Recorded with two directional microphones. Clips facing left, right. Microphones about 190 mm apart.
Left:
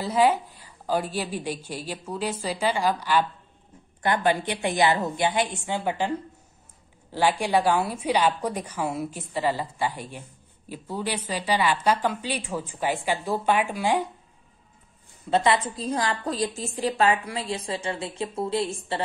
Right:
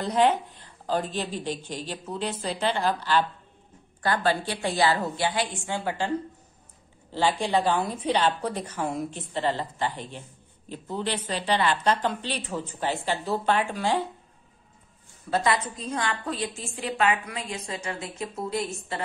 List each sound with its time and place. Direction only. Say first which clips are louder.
0.0 s a woman's voice: left 1 dB; 5° left (ahead or behind)
15.2 s a woman's voice: left 3 dB; 25° left (ahead or behind)